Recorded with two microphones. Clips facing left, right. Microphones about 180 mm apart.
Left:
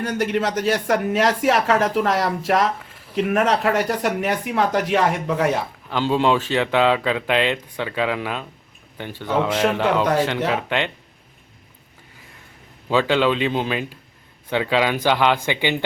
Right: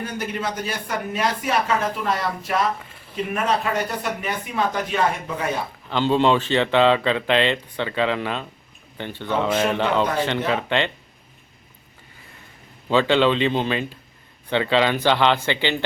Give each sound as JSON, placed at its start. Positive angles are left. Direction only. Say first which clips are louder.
{"t": 0.0, "sound": "speech", "louder": "left 6 dB", "side_deg": 80}
{"t": 5.9, "sound": "speech", "louder": "right 1 dB", "side_deg": 5}
{"t": 12.9, "sound": "speech", "louder": "right 1 dB", "side_deg": 5}